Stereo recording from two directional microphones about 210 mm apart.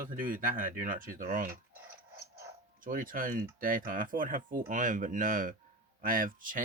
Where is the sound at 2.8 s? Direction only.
40° right (ahead or behind).